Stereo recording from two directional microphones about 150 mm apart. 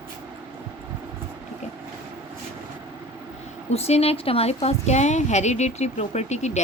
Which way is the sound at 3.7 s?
45° left (ahead or behind).